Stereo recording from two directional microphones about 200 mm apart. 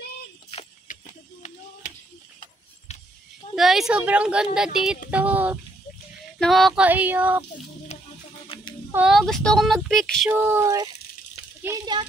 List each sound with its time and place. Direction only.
0.5 s a sound: 35° left (ahead or behind)
3.5 s child singing: centre (ahead or behind)
8.5 s a sound: 25° left (ahead or behind)
8.9 s child singing: 5° right (ahead or behind)
10.3 s child singing: 10° right (ahead or behind)
11.6 s a child's voice: 20° right (ahead or behind)